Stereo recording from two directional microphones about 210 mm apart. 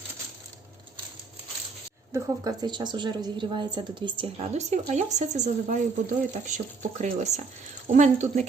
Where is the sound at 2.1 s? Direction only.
20° right (ahead or behind).